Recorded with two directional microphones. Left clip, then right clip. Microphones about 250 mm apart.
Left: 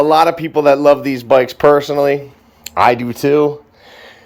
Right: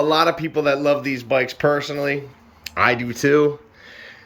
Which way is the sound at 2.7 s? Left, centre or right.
Centre.